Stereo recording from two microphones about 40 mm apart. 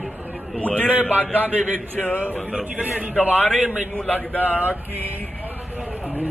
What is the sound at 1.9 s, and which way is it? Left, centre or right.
Speech, left.